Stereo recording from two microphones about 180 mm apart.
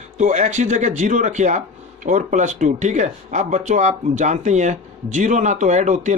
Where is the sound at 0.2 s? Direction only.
40° right (ahead or behind).